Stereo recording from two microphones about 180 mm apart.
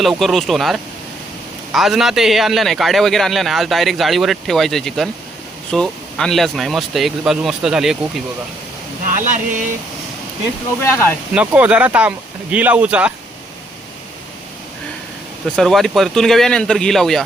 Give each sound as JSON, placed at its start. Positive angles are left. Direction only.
{"t": 0.0, "sound": "a man's voice", "side_deg": 0}
{"t": 9.1, "sound": "speech", "side_deg": -45}
{"t": 10.8, "sound": "speech", "side_deg": 15}
{"t": 11.3, "sound": "speech", "side_deg": -5}
{"t": 15.5, "sound": "a man's voice", "side_deg": 0}